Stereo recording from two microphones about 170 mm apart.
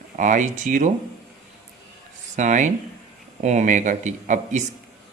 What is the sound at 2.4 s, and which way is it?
Speech, 45° right (ahead or behind).